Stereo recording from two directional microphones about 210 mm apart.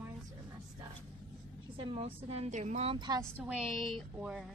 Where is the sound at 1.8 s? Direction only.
25° right (ahead or behind).